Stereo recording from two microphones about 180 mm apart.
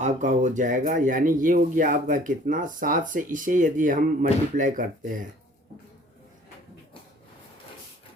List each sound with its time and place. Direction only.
0.0 s speech: 40° right (ahead or behind)